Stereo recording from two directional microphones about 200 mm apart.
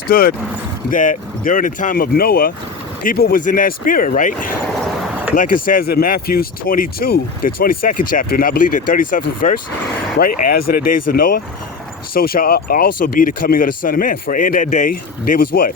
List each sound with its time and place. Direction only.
0.1 s speech: 45° left (ahead or behind)